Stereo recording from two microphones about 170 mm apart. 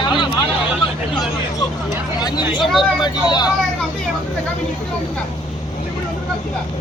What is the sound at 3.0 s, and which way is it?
Speech, 25° left (ahead or behind).